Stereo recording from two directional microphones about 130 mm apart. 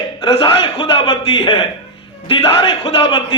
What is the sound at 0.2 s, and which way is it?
A man's voice, 45° left (ahead or behind).